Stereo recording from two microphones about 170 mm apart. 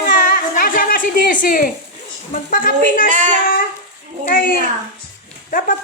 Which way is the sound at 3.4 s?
55° left (ahead or behind).